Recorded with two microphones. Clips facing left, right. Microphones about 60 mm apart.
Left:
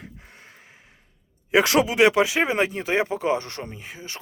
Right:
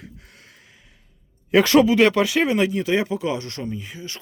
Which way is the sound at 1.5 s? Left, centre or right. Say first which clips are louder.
Right 4 dB; centre.